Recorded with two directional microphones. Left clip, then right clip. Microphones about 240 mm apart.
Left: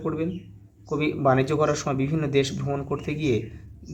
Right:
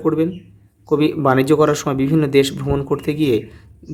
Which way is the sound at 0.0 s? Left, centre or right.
Right.